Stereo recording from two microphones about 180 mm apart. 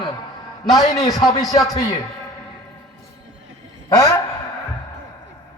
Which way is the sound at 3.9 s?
20° left (ahead or behind).